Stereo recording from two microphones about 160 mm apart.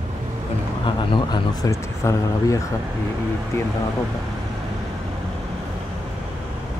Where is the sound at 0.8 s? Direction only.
25° left (ahead or behind).